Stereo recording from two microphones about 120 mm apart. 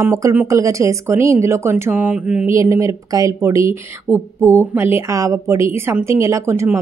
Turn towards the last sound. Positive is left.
turn(degrees=-25)  # may be behind; listen again after turning